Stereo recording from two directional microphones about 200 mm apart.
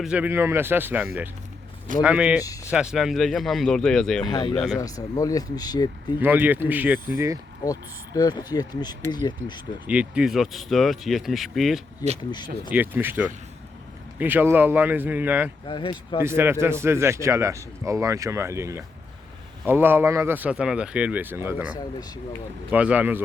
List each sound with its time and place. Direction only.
0.0 s speech: 5° right (ahead or behind)
2.4 s speech: 15° left (ahead or behind)
2.7 s speech: centre (ahead or behind)
4.3 s speech: 20° left (ahead or behind)
4.5 s speech: 5° left (ahead or behind)
4.8 s speech: 15° left (ahead or behind)
6.1 s speech: 10° right (ahead or behind)
7.6 s speech: 15° left (ahead or behind)
9.8 s speech: 5° right (ahead or behind)
12.0 s speech: 20° left (ahead or behind)
12.7 s speech: 10° right (ahead or behind)
15.6 s speech: 25° left (ahead or behind)
16.2 s speech: 10° right (ahead or behind)